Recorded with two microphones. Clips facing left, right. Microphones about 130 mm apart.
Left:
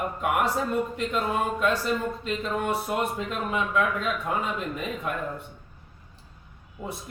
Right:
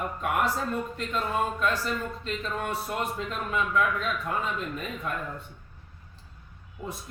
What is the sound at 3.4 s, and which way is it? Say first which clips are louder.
Speech: left 1 dB; 20° left (ahead or behind).